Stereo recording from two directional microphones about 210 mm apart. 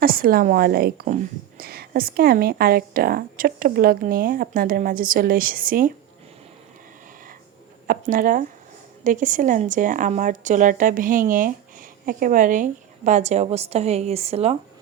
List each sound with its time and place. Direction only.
0.0 s a woman's voice: 45° right (ahead or behind)
7.9 s speech: 40° right (ahead or behind)